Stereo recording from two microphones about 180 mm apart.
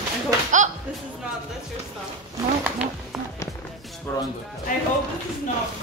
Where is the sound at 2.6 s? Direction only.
5° right (ahead or behind).